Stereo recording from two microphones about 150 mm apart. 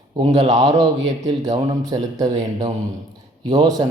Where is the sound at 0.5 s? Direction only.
25° right (ahead or behind).